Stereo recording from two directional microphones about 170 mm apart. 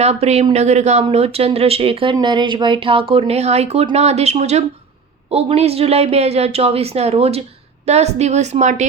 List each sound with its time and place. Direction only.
0.0 s speech: 40° right (ahead or behind)